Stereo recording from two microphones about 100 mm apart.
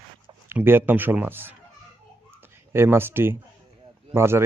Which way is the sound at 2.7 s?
25° right (ahead or behind).